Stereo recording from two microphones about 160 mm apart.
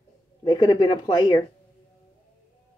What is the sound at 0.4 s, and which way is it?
Speech, 25° left (ahead or behind).